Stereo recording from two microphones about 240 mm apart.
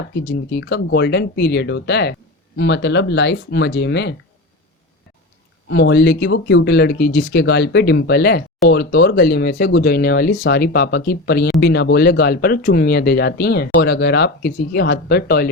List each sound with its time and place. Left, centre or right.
0.1 s speech: left
5.6 s speech: left